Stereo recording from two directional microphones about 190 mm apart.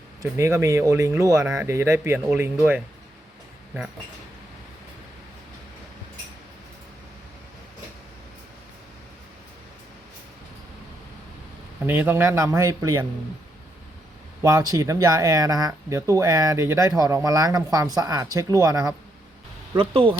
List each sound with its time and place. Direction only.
0.2 s speech: 15° right (ahead or behind)
11.8 s speech: 10° right (ahead or behind)
14.4 s speech: 15° right (ahead or behind)